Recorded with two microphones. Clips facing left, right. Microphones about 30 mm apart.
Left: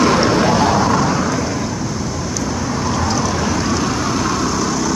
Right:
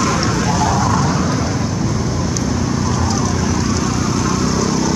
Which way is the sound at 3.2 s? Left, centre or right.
Left.